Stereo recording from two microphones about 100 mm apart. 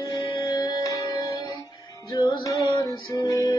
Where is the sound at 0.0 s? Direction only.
40° left (ahead or behind).